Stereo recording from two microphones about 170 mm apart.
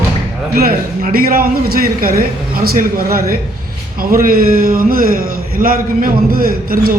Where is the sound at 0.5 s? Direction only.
60° right (ahead or behind).